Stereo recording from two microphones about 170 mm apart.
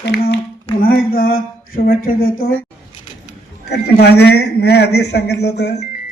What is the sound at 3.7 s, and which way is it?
A man's voice, 75° left (ahead or behind).